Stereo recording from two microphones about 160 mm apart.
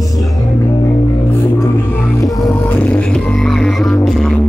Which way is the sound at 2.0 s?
20° left (ahead or behind).